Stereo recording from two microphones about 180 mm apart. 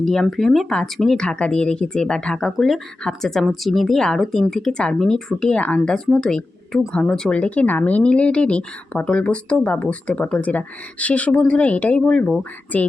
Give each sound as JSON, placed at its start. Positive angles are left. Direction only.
{"t": 0.0, "sound": "speech", "side_deg": 0}